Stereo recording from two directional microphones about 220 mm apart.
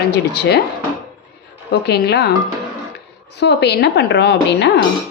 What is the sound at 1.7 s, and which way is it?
Speech, 50° left (ahead or behind).